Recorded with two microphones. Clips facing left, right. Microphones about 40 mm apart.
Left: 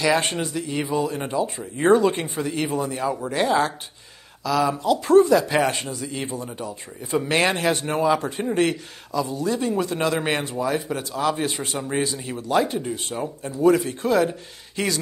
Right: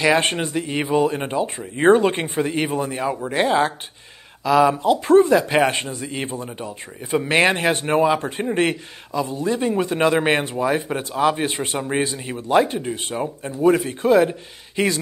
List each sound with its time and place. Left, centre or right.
0.0 s speech: right
11.5 s speech: right